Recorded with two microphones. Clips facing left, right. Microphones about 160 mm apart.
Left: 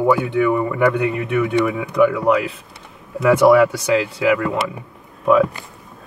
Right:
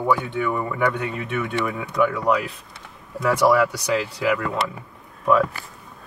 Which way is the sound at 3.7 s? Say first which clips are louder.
Left 5 dB; centre (ahead or behind).